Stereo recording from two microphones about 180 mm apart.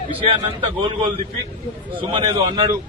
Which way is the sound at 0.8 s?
25° right (ahead or behind).